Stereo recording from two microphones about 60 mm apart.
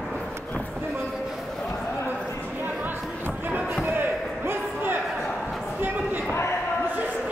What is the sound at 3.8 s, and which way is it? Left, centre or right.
Slam, right.